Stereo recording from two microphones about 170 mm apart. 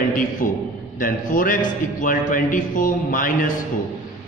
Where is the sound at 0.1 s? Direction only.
50° left (ahead or behind).